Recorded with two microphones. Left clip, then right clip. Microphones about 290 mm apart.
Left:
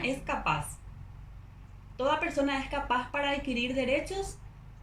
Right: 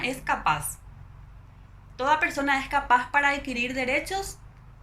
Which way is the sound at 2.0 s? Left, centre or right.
Centre.